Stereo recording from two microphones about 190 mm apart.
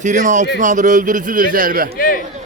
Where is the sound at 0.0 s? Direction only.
40° right (ahead or behind).